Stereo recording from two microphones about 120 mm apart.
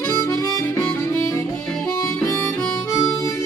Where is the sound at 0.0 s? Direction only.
25° left (ahead or behind).